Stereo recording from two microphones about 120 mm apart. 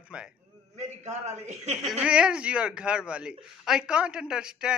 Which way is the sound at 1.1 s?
70° right (ahead or behind).